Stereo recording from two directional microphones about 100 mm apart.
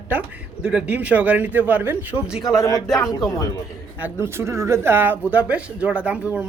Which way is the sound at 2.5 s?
35° left (ahead or behind).